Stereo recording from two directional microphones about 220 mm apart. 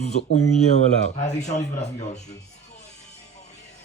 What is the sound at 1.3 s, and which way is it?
Speech, 30° left (ahead or behind).